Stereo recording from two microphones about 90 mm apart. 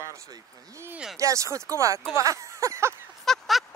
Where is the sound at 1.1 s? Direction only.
35° right (ahead or behind).